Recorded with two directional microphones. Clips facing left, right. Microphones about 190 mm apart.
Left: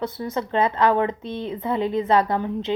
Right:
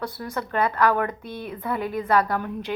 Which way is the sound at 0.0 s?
20° left (ahead or behind).